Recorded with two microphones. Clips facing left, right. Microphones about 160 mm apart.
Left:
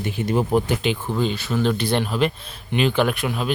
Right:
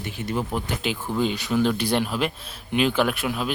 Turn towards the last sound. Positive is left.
turn(degrees=0)  # may be behind; listen again after turning